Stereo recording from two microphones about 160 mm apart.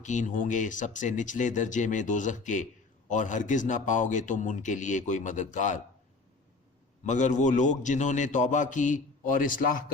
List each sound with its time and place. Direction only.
0.0 s a man's voice: 50° left (ahead or behind)
7.0 s a man's voice: 50° left (ahead or behind)